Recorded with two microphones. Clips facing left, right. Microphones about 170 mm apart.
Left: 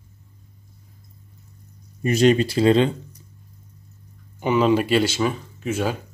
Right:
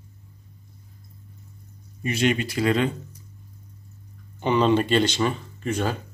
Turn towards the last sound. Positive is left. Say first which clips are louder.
# left 2 dB
turn(degrees=5)  # may be behind; listen again after turning